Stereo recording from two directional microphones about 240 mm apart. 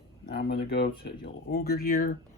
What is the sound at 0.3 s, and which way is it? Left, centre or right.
Speech, left.